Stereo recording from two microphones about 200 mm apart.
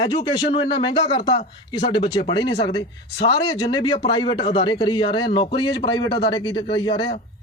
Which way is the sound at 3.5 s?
20° left (ahead or behind).